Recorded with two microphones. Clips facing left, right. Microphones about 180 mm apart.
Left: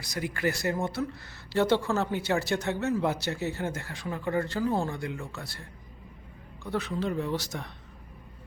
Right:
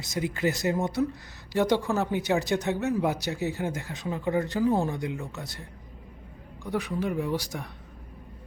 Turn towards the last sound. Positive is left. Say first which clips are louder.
# right 2 dB
turn(degrees=-10)  # may be behind; listen again after turning